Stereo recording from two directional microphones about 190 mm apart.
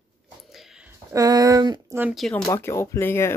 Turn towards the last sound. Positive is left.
turn(degrees=10)  # may be behind; listen again after turning